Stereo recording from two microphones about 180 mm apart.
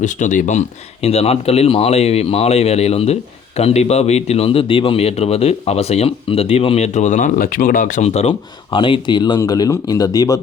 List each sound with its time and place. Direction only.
0.0 s speech: 45° left (ahead or behind); by 10.4 s 20° left (ahead or behind)